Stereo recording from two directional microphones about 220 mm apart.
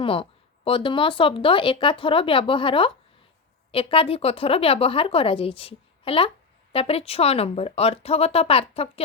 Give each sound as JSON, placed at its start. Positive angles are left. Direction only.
{"t": 0.0, "sound": "speech", "side_deg": 25}